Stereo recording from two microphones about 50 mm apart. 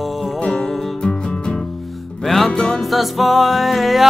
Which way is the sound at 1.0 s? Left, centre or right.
Centre.